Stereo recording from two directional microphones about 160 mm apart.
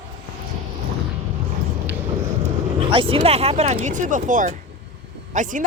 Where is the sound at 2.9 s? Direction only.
30° right (ahead or behind).